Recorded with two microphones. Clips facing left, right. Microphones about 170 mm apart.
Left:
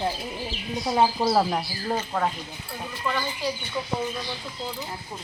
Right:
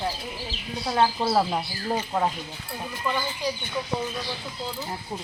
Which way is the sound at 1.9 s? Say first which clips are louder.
Right 1 dB; 10° right (ahead or behind).